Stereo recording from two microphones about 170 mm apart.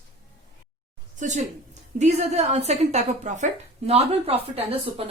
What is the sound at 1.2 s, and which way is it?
A woman's voice, 50° right (ahead or behind).